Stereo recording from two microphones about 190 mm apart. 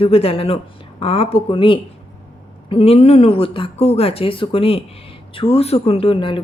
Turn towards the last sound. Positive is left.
turn(degrees=25)  # may be behind; listen again after turning